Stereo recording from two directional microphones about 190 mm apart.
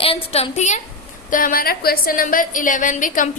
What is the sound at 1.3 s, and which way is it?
A woman's voice, 45° left (ahead or behind).